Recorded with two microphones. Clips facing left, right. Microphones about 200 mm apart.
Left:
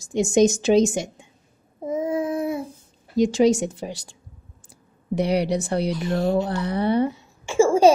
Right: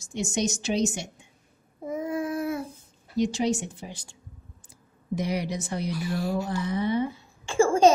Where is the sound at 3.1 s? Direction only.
90° left.